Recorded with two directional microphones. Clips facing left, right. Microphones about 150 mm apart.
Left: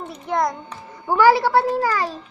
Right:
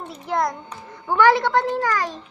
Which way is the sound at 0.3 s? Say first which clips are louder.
Left 1 dB; centre (ahead or behind).